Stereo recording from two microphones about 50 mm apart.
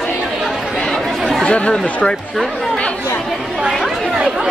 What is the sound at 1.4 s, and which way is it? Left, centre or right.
Speech, centre.